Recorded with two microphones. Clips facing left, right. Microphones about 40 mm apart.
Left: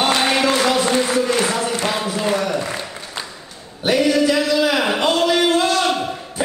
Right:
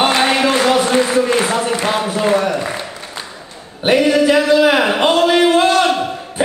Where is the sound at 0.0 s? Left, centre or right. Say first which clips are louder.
Right 3 dB; right.